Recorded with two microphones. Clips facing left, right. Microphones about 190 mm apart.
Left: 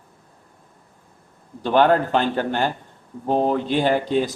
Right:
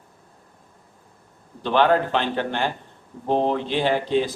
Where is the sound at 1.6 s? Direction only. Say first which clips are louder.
Left 2 dB; 45° left (ahead or behind).